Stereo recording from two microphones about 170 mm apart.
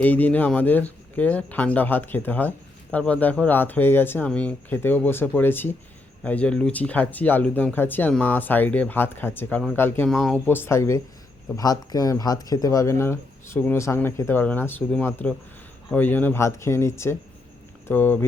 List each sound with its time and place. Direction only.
0.0 s speech: 10° left (ahead or behind)
10.1 s speech: centre (ahead or behind)